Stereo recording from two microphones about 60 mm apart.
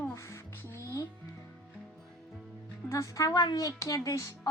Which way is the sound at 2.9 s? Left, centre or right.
Left.